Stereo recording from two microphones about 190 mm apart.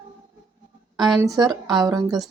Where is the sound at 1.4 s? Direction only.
20° right (ahead or behind).